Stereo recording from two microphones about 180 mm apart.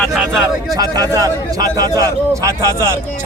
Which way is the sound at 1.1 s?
20° right (ahead or behind).